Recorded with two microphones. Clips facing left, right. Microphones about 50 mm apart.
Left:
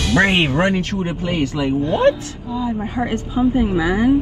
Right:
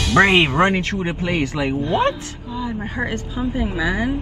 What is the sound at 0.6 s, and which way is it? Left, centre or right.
A man's voice, right.